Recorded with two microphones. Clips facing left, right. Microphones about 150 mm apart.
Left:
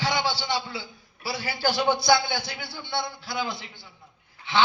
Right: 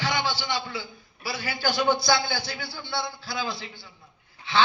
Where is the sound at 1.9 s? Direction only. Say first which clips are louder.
Left 3 dB; 30° right (ahead or behind).